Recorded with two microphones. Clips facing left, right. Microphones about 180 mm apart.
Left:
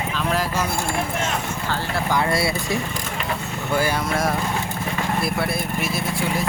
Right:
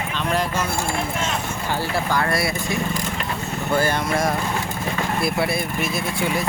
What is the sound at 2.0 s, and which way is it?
Speech, 20° left (ahead or behind).